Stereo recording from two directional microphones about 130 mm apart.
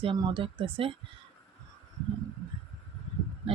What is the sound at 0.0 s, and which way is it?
Speech, 40° right (ahead or behind).